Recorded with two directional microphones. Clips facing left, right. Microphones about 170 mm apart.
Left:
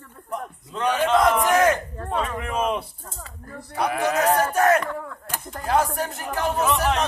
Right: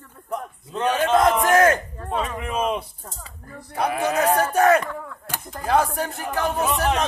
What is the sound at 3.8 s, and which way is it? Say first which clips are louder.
Speech: even; 25° right (ahead or behind).